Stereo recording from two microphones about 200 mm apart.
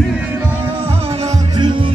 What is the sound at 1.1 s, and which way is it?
Music, 30° right (ahead or behind).